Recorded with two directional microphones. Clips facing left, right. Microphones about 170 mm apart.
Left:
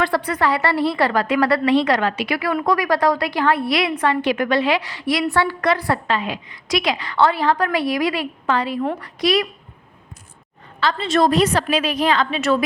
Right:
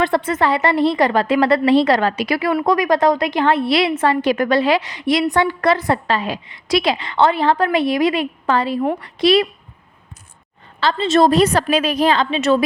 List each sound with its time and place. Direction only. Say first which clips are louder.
0.0 s a woman's voice: right 3 dB; 25° right (ahead or behind)
1.7 s a woman's voice: right 3 dB; 35° right (ahead or behind)
2.6 s a woman's voice: right 3 dB; 20° right (ahead or behind); by 4.8 s 35° right (ahead or behind)
4.8 s a woman's voice: right 3 dB; 20° right (ahead or behind)
5.5 s a woman's voice: right 3 dB; 30° right (ahead or behind)
8.8 s a woman's voice: right 3 dB; 15° right (ahead or behind)
9.2 s a woman's voice: right 5 dB; 30° right (ahead or behind)
10.8 s a woman's voice: right 3 dB; 30° right (ahead or behind)